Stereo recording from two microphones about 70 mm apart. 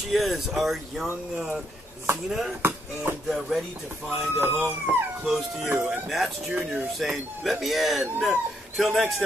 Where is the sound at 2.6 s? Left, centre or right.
Right.